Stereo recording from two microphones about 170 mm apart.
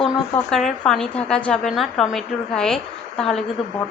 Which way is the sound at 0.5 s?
5° left (ahead or behind).